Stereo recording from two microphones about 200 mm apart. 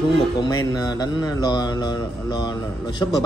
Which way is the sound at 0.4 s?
20° left (ahead or behind).